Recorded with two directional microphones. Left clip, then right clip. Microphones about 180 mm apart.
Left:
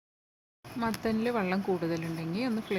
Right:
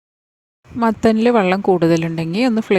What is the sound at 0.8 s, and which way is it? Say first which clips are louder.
Speech: right 16 dB; 45° right (ahead or behind).